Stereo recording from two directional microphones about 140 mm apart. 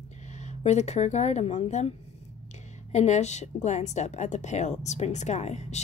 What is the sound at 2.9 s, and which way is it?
A woman's voice, 55° left (ahead or behind).